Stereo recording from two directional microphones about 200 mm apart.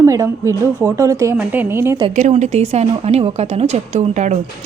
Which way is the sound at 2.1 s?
35° right (ahead or behind).